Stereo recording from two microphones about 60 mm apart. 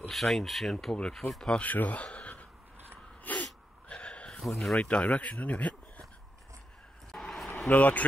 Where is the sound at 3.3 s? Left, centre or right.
Left.